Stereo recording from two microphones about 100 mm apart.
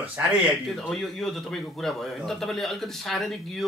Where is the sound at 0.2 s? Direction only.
25° right (ahead or behind).